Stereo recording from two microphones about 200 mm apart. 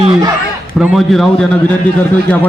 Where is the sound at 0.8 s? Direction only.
Centre (ahead or behind).